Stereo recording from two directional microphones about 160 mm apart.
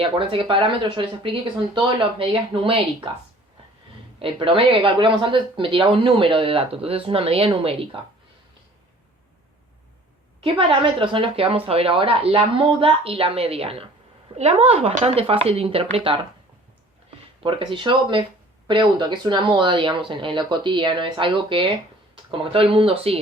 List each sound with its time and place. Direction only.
0.0 s speech: 35° right (ahead or behind)
4.2 s speech: 35° right (ahead or behind)
10.4 s speech: 35° right (ahead or behind)
17.4 s speech: 30° right (ahead or behind)